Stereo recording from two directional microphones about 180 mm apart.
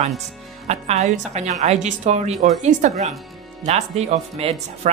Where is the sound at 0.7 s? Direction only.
40° right (ahead or behind).